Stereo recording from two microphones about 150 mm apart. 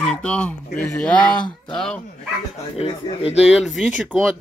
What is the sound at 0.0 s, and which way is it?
Speech, 5° left (ahead or behind).